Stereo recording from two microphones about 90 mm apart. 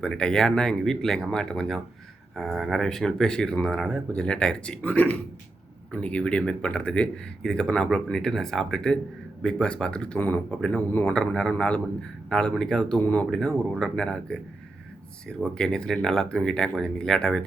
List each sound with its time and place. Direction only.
0.0 s speech: 10° left (ahead or behind)
11.0 s speech: 5° left (ahead or behind)
13.0 s speech: 20° left (ahead or behind)
13.3 s speech: 5° left (ahead or behind)